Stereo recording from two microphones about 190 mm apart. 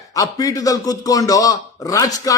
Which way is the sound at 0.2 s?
20° left (ahead or behind).